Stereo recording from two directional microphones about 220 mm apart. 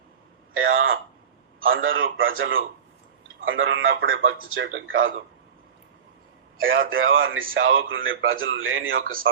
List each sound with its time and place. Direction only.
0.5 s a sound: 65° right (ahead or behind)
1.5 s speech: 65° right (ahead or behind)
6.6 s speech: 65° right (ahead or behind)